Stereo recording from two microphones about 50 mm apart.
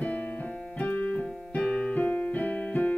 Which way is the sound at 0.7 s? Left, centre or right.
Left.